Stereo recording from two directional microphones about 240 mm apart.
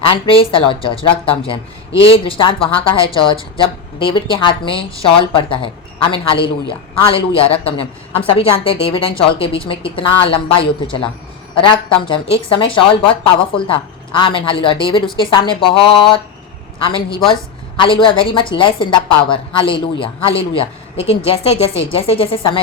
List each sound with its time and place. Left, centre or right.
0.1 s a woman's voice: left
17.7 s a woman's voice: left